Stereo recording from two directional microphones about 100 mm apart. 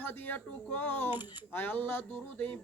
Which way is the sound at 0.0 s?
20° left (ahead or behind).